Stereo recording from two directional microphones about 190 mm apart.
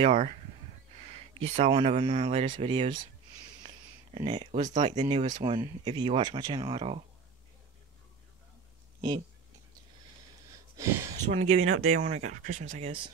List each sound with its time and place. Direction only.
0.0 s speech: 35° right (ahead or behind)
3.6 s a sound: 35° right (ahead or behind)
4.8 s speech: 35° right (ahead or behind)
5.3 s speech: 25° right (ahead or behind)
10.8 s speech: 15° right (ahead or behind)
11.3 s speech: 35° right (ahead or behind)